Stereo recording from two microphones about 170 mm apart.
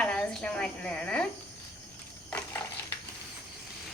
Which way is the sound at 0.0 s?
5° left (ahead or behind).